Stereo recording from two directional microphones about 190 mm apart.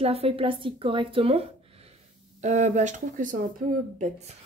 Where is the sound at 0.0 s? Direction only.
30° right (ahead or behind).